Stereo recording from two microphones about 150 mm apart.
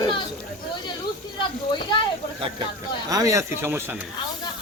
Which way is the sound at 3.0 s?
20° right (ahead or behind).